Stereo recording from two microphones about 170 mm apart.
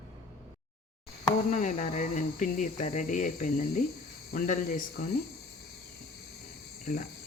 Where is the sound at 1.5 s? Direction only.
45° left (ahead or behind).